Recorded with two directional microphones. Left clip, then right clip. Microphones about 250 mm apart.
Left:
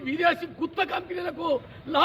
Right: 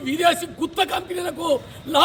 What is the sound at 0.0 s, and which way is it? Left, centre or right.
A man's voice, centre.